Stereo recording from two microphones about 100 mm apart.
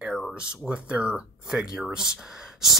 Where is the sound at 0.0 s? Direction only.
Centre (ahead or behind).